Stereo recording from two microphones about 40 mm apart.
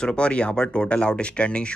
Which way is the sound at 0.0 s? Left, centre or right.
Left.